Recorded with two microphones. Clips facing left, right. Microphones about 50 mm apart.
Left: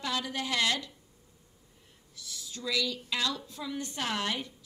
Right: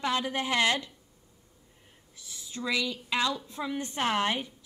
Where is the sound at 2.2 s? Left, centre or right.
Right.